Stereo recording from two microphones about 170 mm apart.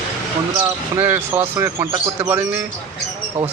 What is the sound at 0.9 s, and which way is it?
Speech, 10° right (ahead or behind).